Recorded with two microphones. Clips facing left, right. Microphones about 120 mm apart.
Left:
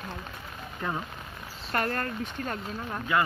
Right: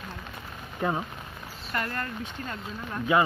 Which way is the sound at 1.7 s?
45° left (ahead or behind).